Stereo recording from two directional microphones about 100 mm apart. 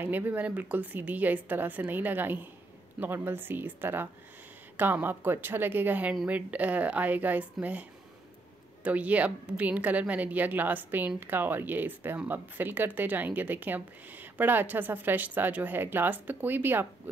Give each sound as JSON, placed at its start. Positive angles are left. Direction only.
{"t": 0.0, "sound": "a woman's voice", "side_deg": -20}
{"t": 8.8, "sound": "a woman's voice", "side_deg": -15}